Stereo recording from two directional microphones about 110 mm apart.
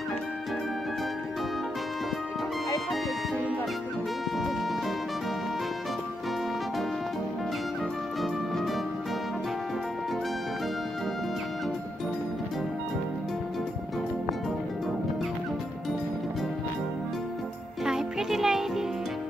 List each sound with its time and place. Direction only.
17.8 s music: 5° right (ahead or behind)